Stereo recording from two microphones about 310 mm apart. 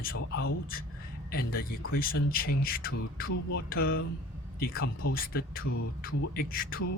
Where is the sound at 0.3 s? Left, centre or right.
Left.